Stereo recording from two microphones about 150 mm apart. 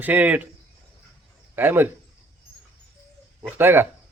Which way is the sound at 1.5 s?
15° right (ahead or behind).